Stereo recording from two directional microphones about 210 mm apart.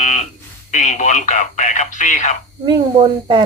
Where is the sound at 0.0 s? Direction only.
35° left (ahead or behind).